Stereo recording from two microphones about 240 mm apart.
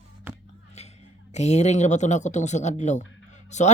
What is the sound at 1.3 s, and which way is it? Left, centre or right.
Speech, left.